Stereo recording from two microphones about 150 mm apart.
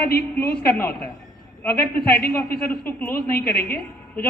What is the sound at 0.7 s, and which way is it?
Speech, 10° left (ahead or behind).